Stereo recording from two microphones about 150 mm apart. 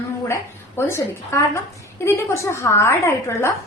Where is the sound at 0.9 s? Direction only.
20° left (ahead or behind).